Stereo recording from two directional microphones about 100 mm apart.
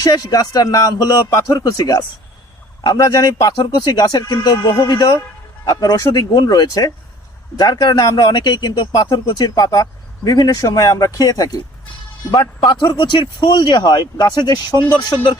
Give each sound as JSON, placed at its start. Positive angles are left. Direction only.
{"t": 0.0, "sound": "speech", "side_deg": 35}